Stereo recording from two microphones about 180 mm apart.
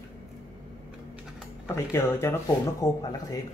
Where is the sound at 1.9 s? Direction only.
15° left (ahead or behind).